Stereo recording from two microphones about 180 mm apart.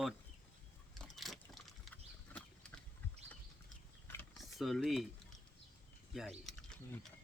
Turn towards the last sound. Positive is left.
turn(degrees=0)  # may be behind; listen again after turning